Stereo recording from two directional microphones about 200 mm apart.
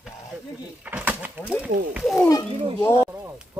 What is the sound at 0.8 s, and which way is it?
Speech, 5° right (ahead or behind).